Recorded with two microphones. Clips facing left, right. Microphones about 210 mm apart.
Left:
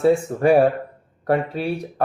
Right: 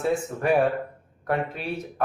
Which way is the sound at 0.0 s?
30° left (ahead or behind).